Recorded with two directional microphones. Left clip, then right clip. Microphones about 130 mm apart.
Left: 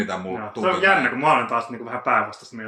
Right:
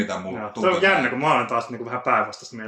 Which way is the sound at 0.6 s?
40° right (ahead or behind).